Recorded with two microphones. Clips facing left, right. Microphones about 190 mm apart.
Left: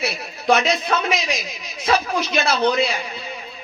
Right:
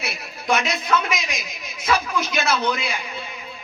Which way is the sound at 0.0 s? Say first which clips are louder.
Left 7 dB; 30° left (ahead or behind).